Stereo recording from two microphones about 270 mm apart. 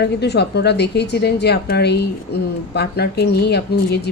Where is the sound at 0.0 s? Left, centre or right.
Left.